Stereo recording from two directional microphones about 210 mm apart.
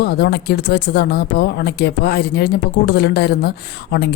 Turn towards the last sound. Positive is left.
turn(degrees=50)  # may be behind; listen again after turning